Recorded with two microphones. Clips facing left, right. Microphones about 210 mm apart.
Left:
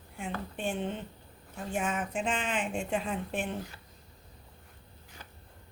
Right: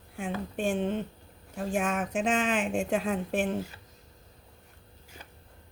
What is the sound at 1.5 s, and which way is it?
Speech, 90° right.